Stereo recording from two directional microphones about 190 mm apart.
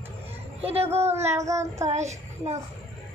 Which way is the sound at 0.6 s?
30° right (ahead or behind).